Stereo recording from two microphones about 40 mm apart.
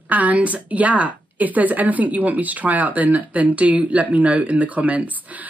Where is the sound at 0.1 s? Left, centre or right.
Right.